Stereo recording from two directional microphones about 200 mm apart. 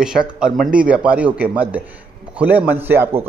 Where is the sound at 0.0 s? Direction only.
5° right (ahead or behind).